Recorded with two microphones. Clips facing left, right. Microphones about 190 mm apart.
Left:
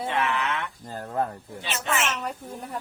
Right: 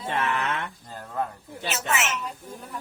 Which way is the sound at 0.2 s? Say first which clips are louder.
Even; 50° right (ahead or behind).